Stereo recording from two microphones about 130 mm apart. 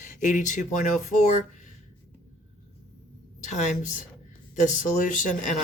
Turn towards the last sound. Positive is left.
turn(degrees=75)  # may be behind; listen again after turning